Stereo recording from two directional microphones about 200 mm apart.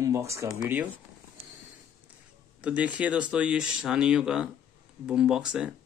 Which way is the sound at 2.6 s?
5° right (ahead or behind).